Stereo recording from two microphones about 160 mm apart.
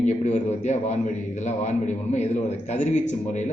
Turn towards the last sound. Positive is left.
turn(degrees=50)  # may be behind; listen again after turning